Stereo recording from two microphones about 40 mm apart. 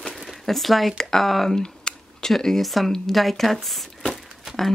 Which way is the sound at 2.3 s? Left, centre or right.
Centre.